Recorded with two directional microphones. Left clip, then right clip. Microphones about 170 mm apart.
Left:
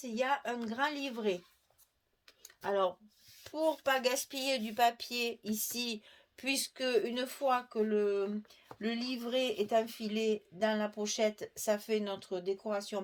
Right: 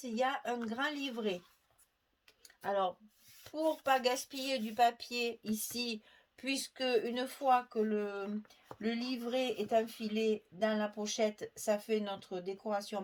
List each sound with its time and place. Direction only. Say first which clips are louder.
0.0 s speech: left 1 dB; 40° left (ahead or behind)
2.4 s a sound: left 2 dB; 45° left (ahead or behind)
3.4 s speech: left 2 dB; 40° left (ahead or behind)